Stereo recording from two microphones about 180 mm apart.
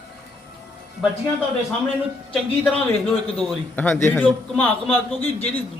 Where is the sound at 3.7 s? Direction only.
10° left (ahead or behind).